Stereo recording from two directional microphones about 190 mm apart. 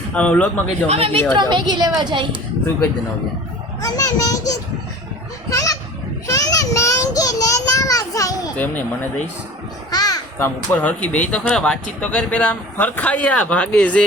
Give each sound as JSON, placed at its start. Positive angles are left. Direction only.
{"t": 0.1, "sound": "speech", "side_deg": 5}
{"t": 0.9, "sound": "a woman's voice", "side_deg": -30}
{"t": 3.8, "sound": "a child's voice", "side_deg": 20}
{"t": 6.2, "sound": "child singing", "side_deg": 20}
{"t": 9.9, "sound": "speech", "side_deg": 20}